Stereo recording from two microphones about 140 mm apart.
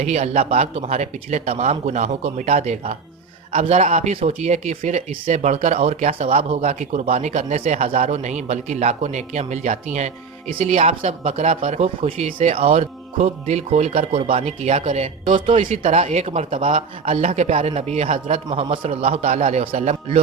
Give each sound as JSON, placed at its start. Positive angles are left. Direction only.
{"t": 0.0, "sound": "a man's voice", "side_deg": -50}
{"t": 15.2, "sound": "speech", "side_deg": -35}
{"t": 15.7, "sound": "a man's voice", "side_deg": -50}